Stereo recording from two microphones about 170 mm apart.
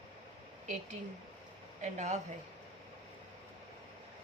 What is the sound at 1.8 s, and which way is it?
Speech, 45° right (ahead or behind).